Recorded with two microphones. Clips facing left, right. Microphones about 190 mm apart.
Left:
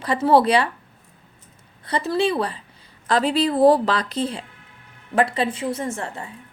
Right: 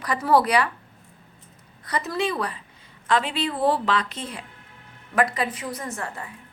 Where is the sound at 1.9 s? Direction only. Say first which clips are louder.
Left 5 dB; 30° left (ahead or behind).